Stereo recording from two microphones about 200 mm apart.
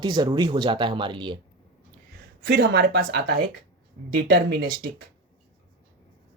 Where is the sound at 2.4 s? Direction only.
55° right (ahead or behind).